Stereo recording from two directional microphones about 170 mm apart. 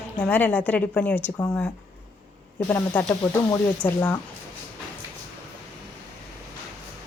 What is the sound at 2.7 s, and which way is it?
A woman's voice, 10° left (ahead or behind).